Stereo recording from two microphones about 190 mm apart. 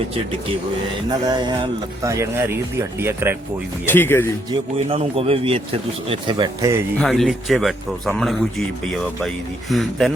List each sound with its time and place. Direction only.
1.2 s speech: 20° right (ahead or behind)
3.8 s speech: 10° left (ahead or behind)
4.9 s speech: 30° right (ahead or behind)
7.0 s speech: centre (ahead or behind)